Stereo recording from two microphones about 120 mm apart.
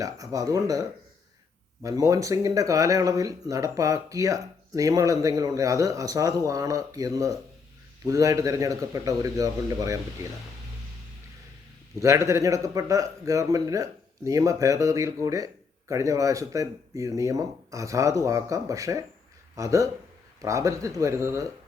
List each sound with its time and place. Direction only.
0.0 s speech: 30° right (ahead or behind)
12.0 s speech: 25° right (ahead or behind)